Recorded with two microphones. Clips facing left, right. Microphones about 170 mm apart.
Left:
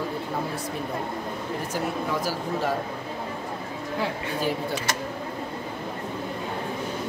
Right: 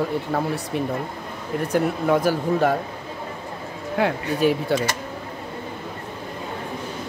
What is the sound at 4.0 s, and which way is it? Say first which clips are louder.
Speech: right 8 dB; 65° right (ahead or behind).